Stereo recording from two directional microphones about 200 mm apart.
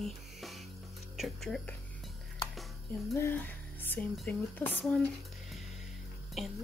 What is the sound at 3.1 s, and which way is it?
Speech, 10° left (ahead or behind).